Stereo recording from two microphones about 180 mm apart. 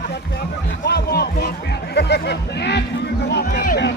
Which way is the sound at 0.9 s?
65° left (ahead or behind).